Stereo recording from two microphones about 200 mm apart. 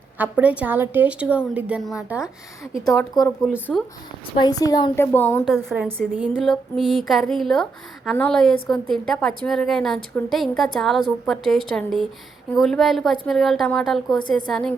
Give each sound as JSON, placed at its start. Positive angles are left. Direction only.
{"t": 0.2, "sound": "a woman's voice", "side_deg": -5}
{"t": 4.4, "sound": "a woman's voice", "side_deg": 20}